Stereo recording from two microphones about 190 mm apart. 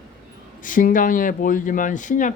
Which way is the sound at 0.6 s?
45° left (ahead or behind).